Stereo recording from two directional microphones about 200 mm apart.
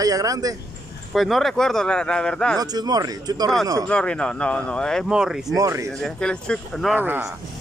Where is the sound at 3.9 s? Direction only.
5° left (ahead or behind).